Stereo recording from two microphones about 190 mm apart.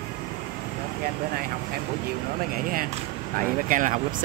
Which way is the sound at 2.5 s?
50° right (ahead or behind).